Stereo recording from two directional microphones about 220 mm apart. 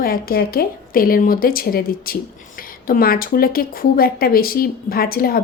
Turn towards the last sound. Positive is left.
turn(degrees=40)  # may be behind; listen again after turning